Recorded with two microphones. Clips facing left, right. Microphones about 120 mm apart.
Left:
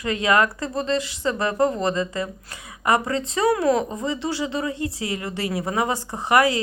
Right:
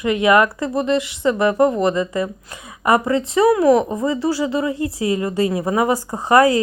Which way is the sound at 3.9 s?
40° right (ahead or behind).